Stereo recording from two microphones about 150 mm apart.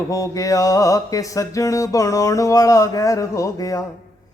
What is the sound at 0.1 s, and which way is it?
Speech, 20° left (ahead or behind).